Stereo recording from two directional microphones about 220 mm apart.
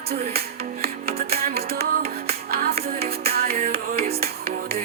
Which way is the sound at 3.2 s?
45° right (ahead or behind).